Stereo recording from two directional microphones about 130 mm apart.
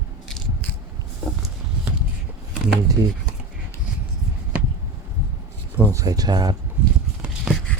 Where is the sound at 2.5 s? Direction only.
10° right (ahead or behind).